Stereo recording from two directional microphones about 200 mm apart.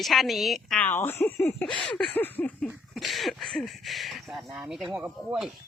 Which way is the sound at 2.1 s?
10° left (ahead or behind).